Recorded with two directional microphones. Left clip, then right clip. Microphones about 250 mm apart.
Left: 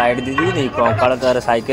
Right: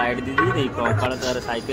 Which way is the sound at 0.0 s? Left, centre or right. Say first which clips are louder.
Left 5 dB; centre.